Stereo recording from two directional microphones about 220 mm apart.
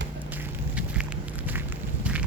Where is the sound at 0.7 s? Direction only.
5° right (ahead or behind).